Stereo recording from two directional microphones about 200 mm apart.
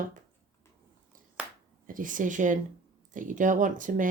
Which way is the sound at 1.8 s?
40° right (ahead or behind).